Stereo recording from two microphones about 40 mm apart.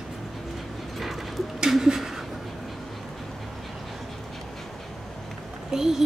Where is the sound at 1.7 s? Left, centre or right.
Centre.